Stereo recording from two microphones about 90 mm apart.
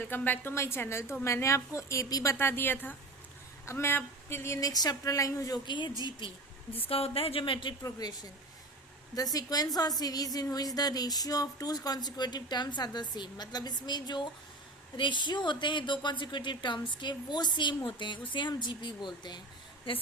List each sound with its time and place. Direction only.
0.0 s a woman's voice: 25° left (ahead or behind); by 2.3 s 40° left (ahead or behind)
2.3 s a woman's voice: 25° left (ahead or behind)
5.6 s speech: 60° left (ahead or behind)
6.8 s speech: 90° left; by 7.7 s 70° left (ahead or behind)
7.9 s speech: 45° left (ahead or behind)